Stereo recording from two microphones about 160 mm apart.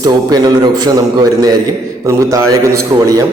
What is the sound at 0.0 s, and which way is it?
A man's voice, 25° right (ahead or behind).